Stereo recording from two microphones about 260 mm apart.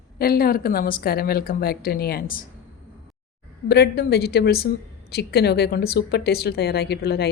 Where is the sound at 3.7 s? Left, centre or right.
Left.